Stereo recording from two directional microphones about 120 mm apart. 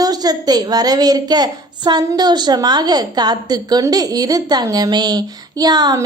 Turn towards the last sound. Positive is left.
turn(degrees=-35)  # may be behind; listen again after turning